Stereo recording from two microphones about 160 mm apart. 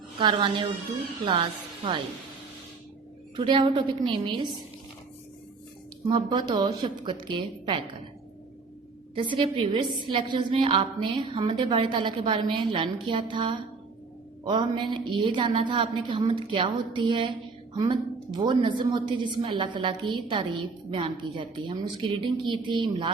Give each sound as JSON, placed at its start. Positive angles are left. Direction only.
{"t": 0.2, "sound": "a woman's voice", "side_deg": -30}
{"t": 3.3, "sound": "a woman's voice", "side_deg": -30}
{"t": 6.1, "sound": "a woman's voice", "side_deg": -30}
{"t": 9.1, "sound": "a woman's voice", "side_deg": -30}